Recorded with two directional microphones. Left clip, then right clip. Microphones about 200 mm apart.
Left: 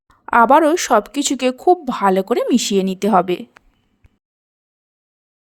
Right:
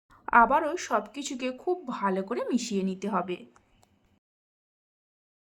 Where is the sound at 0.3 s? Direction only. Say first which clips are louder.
Left 10 dB; 45° left (ahead or behind).